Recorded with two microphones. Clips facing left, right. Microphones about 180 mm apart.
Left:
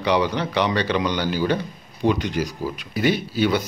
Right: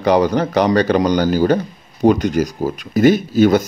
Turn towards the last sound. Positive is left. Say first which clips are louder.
# right 8 dB
turn(degrees=-45)  # may be behind; listen again after turning